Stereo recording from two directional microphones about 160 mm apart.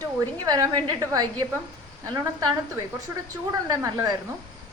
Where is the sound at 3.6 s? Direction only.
20° right (ahead or behind).